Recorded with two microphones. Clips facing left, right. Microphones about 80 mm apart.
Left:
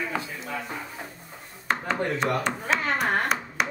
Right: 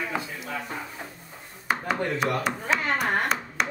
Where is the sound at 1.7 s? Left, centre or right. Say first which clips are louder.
Even; centre.